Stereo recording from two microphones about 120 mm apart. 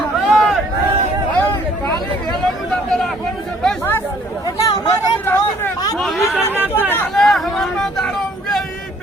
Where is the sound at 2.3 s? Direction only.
5° left (ahead or behind).